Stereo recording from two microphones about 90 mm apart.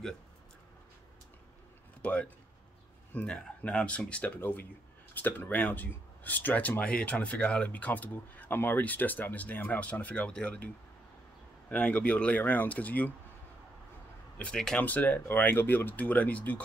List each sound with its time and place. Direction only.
2.0 s speech: 15° left (ahead or behind)
11.7 s speech: 15° left (ahead or behind)
14.4 s speech: 5° left (ahead or behind)
14.8 s speech: 20° left (ahead or behind)